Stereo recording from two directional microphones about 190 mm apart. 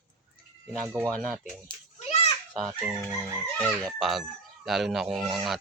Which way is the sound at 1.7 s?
30° left (ahead or behind).